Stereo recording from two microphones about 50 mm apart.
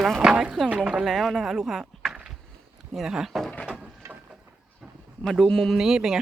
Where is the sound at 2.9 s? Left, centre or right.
Centre.